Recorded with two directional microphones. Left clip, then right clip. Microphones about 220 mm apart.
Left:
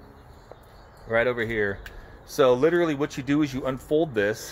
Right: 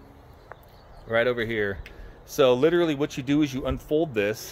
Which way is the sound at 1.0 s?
20° right (ahead or behind).